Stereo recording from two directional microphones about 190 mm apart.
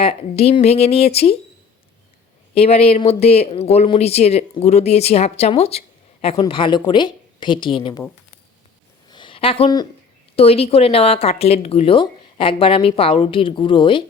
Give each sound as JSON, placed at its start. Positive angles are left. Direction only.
{"t": 0.0, "sound": "speech", "side_deg": 30}
{"t": 2.6, "sound": "speech", "side_deg": 35}
{"t": 9.0, "sound": "a sound", "side_deg": 25}
{"t": 10.3, "sound": "speech", "side_deg": 30}